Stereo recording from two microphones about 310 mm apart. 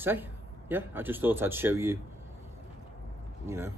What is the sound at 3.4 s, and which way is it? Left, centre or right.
Speech, centre.